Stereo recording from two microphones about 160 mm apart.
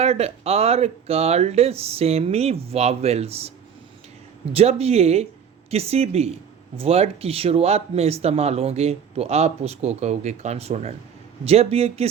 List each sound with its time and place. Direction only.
0.0 s speech: 40° right (ahead or behind)
4.5 s speech: 40° right (ahead or behind)